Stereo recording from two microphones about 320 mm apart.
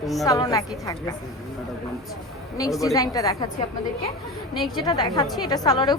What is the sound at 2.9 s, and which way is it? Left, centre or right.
Speech, centre.